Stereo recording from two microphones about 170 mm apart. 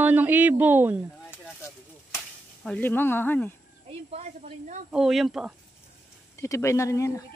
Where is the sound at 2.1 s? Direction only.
5° left (ahead or behind).